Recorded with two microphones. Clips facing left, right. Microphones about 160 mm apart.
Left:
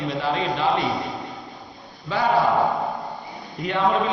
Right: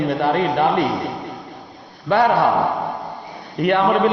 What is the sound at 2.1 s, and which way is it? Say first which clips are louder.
Speech: right 5 dB; 65° right (ahead or behind).